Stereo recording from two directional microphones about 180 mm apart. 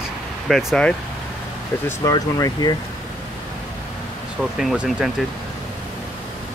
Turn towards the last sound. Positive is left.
turn(degrees=-5)  # may be behind; listen again after turning